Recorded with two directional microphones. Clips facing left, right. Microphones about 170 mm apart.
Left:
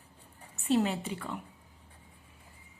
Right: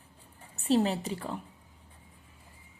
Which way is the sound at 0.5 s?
35° right (ahead or behind).